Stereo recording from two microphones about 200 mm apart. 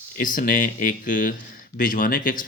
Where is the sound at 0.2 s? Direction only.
45° left (ahead or behind).